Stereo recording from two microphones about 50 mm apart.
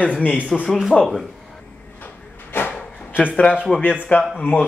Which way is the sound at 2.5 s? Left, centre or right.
Left.